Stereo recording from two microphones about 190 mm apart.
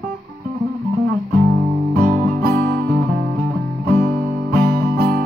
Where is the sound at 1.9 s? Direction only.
50° right (ahead or behind).